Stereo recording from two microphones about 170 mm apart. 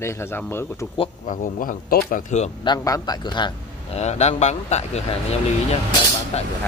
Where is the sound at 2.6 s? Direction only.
20° left (ahead or behind).